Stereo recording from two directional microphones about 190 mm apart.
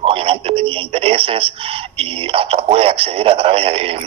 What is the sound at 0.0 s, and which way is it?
Speech, 30° right (ahead or behind).